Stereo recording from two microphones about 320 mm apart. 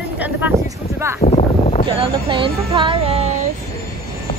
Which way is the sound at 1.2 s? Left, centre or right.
Left.